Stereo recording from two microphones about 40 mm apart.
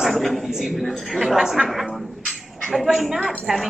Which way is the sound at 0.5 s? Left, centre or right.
Centre.